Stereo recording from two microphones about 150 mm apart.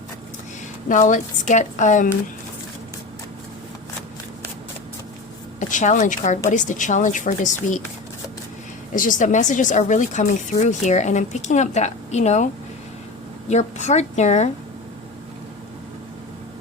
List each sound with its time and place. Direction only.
0.9 s a woman's voice: 55° left (ahead or behind)
5.5 s a woman's voice: 55° left (ahead or behind)
8.9 s speech: 60° left (ahead or behind)
13.5 s speech: 50° left (ahead or behind)